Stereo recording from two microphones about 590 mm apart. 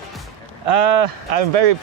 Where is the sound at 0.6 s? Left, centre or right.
Right.